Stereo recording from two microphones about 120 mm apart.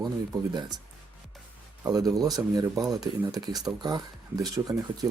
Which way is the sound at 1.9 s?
30° right (ahead or behind).